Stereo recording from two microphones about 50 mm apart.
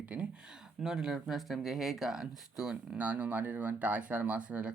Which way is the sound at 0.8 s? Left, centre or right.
Centre.